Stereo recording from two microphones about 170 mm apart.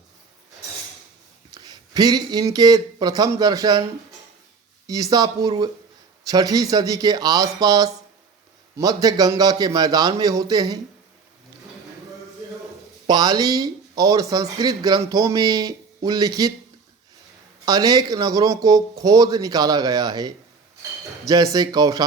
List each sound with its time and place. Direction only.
1.5 s speech: 25° right (ahead or behind)
4.9 s speech: 20° right (ahead or behind)
13.1 s speech: 25° right (ahead or behind)
17.7 s speech: 20° right (ahead or behind)